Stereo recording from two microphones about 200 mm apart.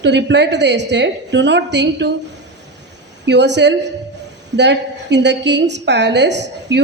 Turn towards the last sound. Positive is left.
turn(degrees=-60)  # may be behind; listen again after turning